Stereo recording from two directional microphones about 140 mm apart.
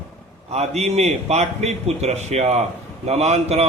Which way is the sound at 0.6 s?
50° right (ahead or behind).